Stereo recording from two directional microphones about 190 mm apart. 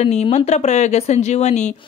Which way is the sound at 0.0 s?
35° left (ahead or behind).